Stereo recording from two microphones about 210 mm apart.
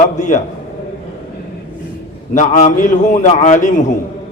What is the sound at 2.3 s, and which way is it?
A man's voice, 35° left (ahead or behind).